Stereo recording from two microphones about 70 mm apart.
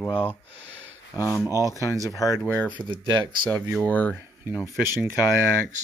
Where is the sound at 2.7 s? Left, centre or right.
Right.